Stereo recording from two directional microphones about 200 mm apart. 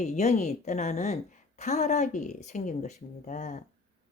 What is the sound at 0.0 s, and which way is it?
Speech, 35° left (ahead or behind).